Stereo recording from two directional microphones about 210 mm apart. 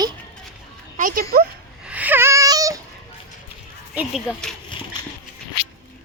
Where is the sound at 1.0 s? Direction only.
40° right (ahead or behind).